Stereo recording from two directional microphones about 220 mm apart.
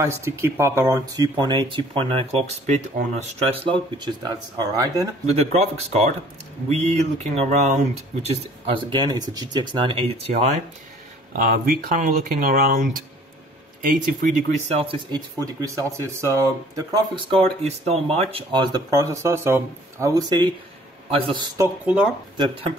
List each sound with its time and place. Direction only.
0.0 s speech: 15° right (ahead or behind)
5.2 s speech: 30° right (ahead or behind)
11.9 s speech: 35° right (ahead or behind)
13.8 s speech: 35° right (ahead or behind); by 21.6 s 20° right (ahead or behind)
21.8 s speech: 5° right (ahead or behind)